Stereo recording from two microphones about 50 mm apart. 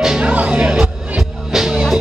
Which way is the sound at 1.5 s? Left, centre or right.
Centre.